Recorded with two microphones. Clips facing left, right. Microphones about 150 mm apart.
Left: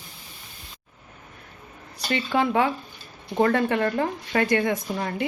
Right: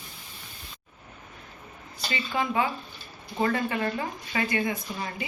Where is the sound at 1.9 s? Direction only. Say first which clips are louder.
Left 6 dB; 65° left (ahead or behind).